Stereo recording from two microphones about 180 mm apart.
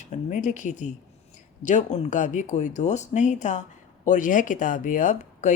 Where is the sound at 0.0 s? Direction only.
40° left (ahead or behind).